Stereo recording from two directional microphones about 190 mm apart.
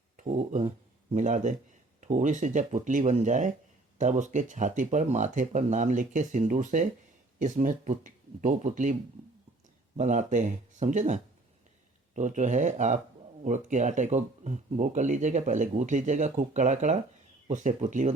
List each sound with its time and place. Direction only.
0.2 s speech: 40° right (ahead or behind)
10.0 s speech: 40° right (ahead or behind)